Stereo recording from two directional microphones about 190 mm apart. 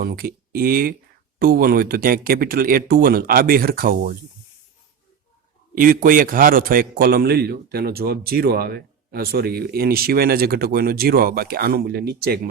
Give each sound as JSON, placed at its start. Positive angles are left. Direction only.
{"t": 0.0, "sound": "a man's voice", "side_deg": -55}
{"t": 5.7, "sound": "a man's voice", "side_deg": -45}